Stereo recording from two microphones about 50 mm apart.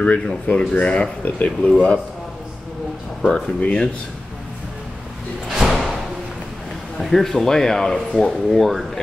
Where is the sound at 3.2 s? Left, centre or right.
Left.